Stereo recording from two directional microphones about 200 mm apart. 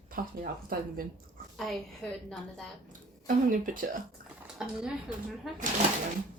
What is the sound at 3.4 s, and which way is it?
Speech, 45° right (ahead or behind).